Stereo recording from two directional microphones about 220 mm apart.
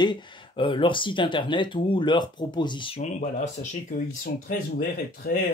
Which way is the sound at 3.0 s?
35° left (ahead or behind).